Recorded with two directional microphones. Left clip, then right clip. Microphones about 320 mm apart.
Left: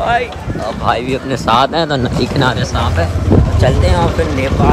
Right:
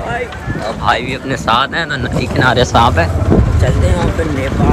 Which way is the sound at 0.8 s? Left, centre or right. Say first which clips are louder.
Right 1 dB; centre.